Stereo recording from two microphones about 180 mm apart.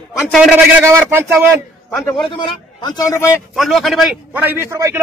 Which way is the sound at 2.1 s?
25° left (ahead or behind).